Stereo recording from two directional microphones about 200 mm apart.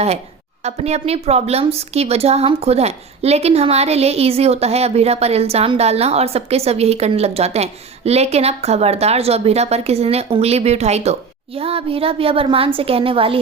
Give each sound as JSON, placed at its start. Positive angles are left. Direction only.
{"t": 0.6, "sound": "a woman's voice", "side_deg": -30}